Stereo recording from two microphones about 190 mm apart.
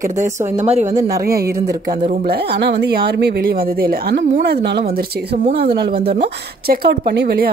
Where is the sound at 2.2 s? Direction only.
55° right (ahead or behind).